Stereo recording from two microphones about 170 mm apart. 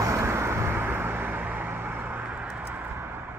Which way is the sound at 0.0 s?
15° right (ahead or behind).